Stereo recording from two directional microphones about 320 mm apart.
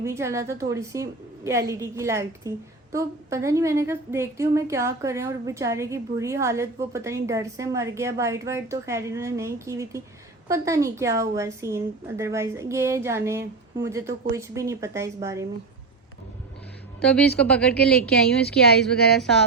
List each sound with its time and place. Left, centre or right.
0.0 s a woman's voice: centre
17.0 s a woman's voice: centre
19.1 s a woman's voice: centre